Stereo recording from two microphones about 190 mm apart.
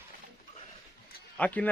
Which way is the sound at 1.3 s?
5° left (ahead or behind).